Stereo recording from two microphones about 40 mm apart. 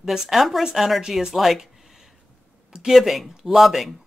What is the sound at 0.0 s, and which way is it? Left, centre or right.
Speech, centre.